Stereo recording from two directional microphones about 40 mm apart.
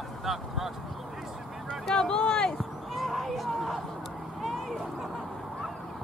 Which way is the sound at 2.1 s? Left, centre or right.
Left.